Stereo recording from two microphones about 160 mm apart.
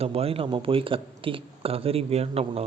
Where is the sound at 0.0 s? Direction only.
40° right (ahead or behind).